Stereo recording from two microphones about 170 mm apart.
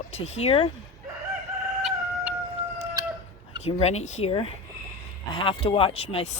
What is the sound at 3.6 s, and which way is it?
Speech, 40° left (ahead or behind).